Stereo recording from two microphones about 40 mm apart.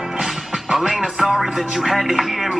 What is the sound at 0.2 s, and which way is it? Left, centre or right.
Music, centre.